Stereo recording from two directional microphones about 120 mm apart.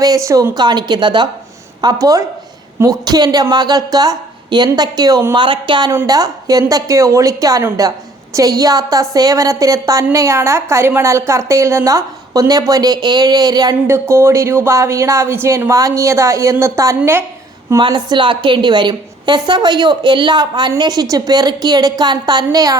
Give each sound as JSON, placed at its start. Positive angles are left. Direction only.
{"t": 0.0, "sound": "a woman's voice", "side_deg": -30}
{"t": 6.1, "sound": "a woman's voice", "side_deg": -30}
{"t": 13.8, "sound": "a woman's voice", "side_deg": -20}
{"t": 17.7, "sound": "a woman's voice", "side_deg": -40}